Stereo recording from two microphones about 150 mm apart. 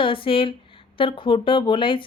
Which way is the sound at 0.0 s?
35° left (ahead or behind).